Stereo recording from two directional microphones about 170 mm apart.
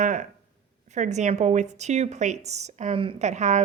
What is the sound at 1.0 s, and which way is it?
A woman's voice, 45° right (ahead or behind).